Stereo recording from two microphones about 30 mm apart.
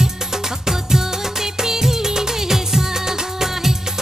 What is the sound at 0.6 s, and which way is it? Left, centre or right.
Music of bollywood, centre.